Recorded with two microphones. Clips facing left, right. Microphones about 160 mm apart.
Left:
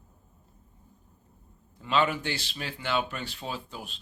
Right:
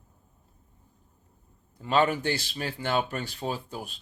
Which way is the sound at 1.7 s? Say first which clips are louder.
Right 2 dB; 40° right (ahead or behind).